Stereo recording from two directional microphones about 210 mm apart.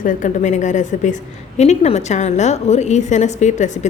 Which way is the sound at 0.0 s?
40° left (ahead or behind).